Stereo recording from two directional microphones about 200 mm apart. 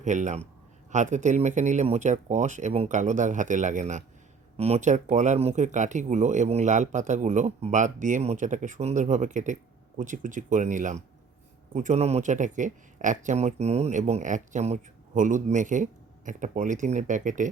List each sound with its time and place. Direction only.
0.0 s speech: 40° right (ahead or behind)